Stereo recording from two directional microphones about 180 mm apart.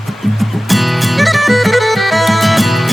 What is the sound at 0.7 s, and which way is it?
Music, centre (ahead or behind).